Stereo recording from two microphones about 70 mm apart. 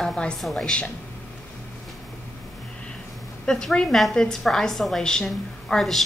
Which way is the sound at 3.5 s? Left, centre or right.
Centre.